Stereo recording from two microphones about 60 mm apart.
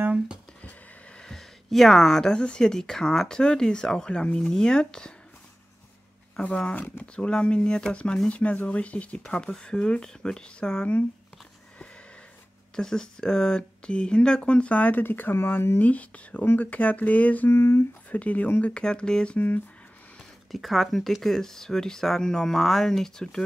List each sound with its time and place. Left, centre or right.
0.6 s a sound: left
1.2 s speech: centre
6.4 s speech: left
12.7 s speech: centre; by 15.8 s left
15.8 s speech: left
17.5 s speech: left
18.1 s speech: left
19.3 s speech: left
20.5 s speech: centre